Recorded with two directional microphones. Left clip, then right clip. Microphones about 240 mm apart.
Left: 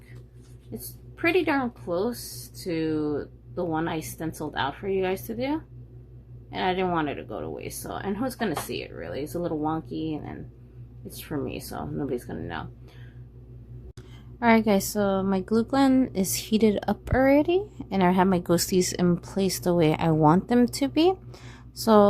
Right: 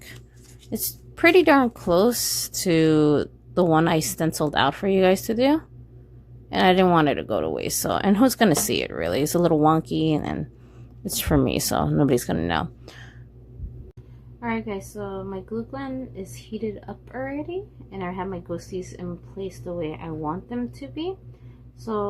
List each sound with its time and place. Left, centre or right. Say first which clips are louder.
0.7 s speech: right 9 dB; right
14.3 s a woman's voice: left 8 dB; left